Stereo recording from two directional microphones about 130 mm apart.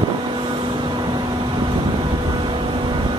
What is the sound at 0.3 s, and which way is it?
Vehicle, 40° right (ahead or behind).